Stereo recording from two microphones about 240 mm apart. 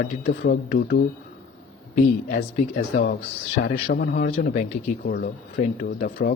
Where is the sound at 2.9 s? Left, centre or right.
Left.